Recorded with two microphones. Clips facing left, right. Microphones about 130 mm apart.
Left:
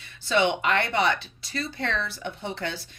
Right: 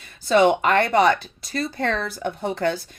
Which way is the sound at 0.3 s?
40° right (ahead or behind).